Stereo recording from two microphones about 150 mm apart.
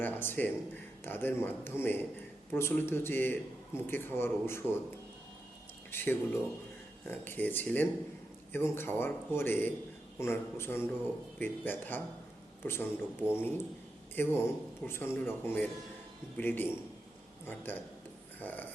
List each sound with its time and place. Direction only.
0.0 s a man's voice: 15° left (ahead or behind)
5.9 s a man's voice: 15° left (ahead or behind)
18.3 s a sound: 10° left (ahead or behind)